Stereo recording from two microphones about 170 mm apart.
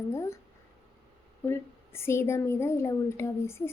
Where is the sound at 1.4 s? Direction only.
15° left (ahead or behind).